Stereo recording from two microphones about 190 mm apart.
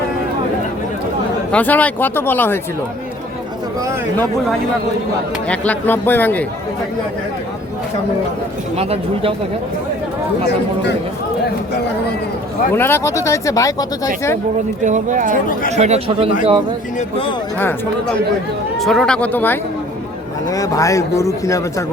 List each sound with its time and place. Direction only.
1.5 s speech: 10° left (ahead or behind)
5.5 s speech: 10° left (ahead or behind)
8.7 s speech: 30° right (ahead or behind)
12.7 s speech: 10° left (ahead or behind)
14.8 s speech: 40° right (ahead or behind)
17.0 s speech: 30° left (ahead or behind)
18.8 s speech: centre (ahead or behind); by 21.8 s 15° left (ahead or behind)